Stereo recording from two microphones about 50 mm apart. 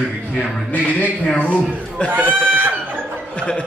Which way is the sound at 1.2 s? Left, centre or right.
Left.